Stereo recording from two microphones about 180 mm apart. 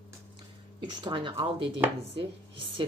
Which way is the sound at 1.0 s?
25° right (ahead or behind).